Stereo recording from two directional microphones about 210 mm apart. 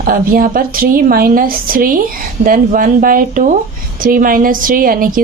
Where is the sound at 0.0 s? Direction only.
40° right (ahead or behind).